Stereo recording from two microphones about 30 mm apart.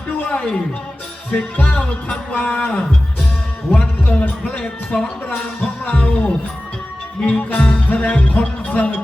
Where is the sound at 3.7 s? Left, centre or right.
Left.